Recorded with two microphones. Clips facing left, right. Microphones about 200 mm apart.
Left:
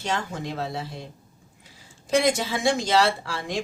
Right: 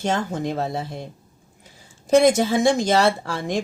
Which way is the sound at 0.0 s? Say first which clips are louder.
Right 6 dB; 50° right (ahead or behind).